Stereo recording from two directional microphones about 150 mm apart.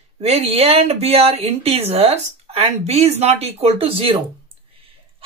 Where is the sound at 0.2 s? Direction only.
45° right (ahead or behind).